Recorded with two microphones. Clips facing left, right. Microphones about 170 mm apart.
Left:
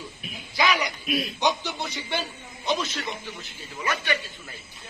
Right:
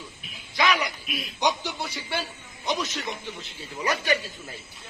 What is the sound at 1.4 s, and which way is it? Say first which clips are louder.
A man's voice: left 1 dB; 10° right (ahead or behind).